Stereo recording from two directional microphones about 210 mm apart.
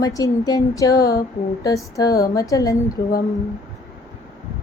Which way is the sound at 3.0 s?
55° left (ahead or behind).